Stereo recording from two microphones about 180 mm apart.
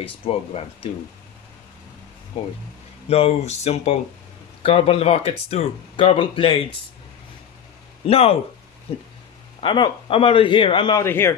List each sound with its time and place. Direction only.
0.0 s speech: 30° left (ahead or behind)
3.1 s a man's voice: 35° left (ahead or behind)
8.1 s speech: 35° left (ahead or behind)
9.6 s a man's voice: 25° left (ahead or behind)
11.1 s a man's voice: 15° left (ahead or behind)